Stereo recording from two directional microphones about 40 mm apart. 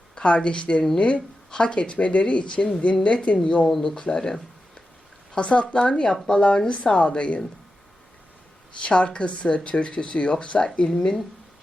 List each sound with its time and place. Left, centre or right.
0.2 s speech: left
5.3 s speech: left
8.8 s speech: left
10.8 s speech: centre